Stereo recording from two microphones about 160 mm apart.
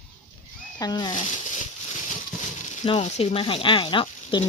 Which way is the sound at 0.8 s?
25° left (ahead or behind).